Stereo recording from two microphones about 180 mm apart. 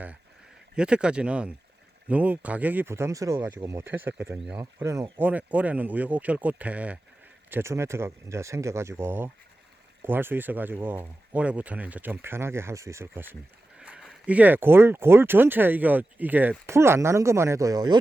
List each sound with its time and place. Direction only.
0.8 s speech: 5° right (ahead or behind); by 18.0 s 20° right (ahead or behind)